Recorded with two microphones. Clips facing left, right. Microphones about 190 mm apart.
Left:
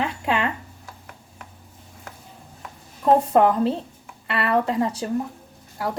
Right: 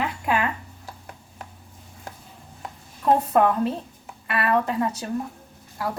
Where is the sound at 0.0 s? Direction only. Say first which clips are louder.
Left 1 dB; 25° left (ahead or behind).